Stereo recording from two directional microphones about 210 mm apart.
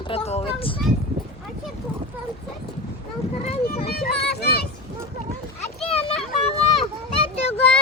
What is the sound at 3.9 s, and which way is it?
Speech, 50° left (ahead or behind).